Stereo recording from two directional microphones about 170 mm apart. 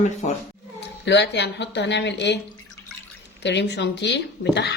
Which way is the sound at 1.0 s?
90° left.